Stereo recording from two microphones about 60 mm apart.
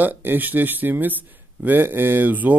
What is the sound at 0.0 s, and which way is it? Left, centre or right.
Speech, right.